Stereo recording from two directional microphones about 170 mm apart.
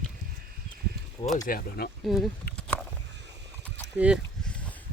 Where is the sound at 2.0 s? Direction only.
Centre (ahead or behind).